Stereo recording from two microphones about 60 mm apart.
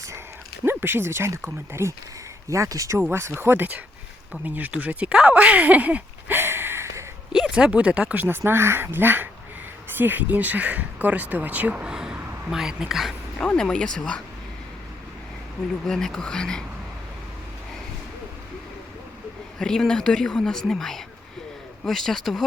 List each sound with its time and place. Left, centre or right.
0.6 s speech: right
2.5 s a man's voice: right
3.1 s speech: right
6.3 s a sound: right
7.5 s speech: right
11.9 s a sound: centre
12.5 s a woman's voice: centre
13.4 s a woman's voice: centre
15.9 s a woman's voice: centre
19.5 s a woman's voice: centre